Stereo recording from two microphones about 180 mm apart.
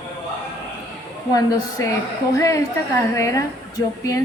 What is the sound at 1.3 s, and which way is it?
A woman's voice, 20° left (ahead or behind).